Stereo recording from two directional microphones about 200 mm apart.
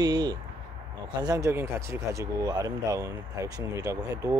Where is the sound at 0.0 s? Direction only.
20° right (ahead or behind).